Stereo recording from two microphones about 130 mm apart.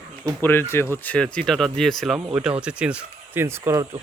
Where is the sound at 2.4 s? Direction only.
10° right (ahead or behind).